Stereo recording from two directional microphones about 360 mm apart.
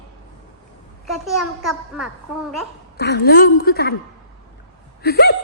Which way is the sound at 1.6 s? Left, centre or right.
Centre.